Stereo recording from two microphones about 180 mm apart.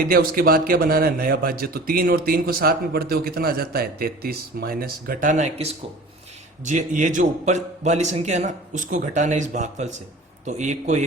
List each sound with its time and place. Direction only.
0.1 s a man's voice: 55° right (ahead or behind)